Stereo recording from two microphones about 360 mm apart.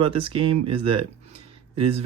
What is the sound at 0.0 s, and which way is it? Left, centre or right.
Speech, centre.